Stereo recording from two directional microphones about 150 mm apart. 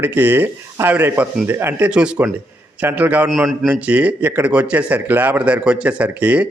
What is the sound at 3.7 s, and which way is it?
Speech, 10° right (ahead or behind).